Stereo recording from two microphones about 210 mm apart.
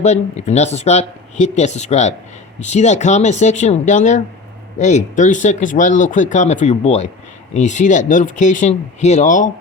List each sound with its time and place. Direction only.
0.0 s speech: 35° left (ahead or behind)